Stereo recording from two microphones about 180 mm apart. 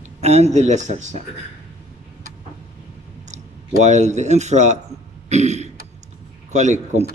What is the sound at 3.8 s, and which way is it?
A man's voice, 40° right (ahead or behind).